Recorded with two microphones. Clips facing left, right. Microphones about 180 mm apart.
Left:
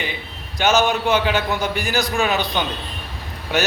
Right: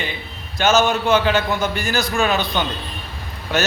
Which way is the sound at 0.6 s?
15° left (ahead or behind).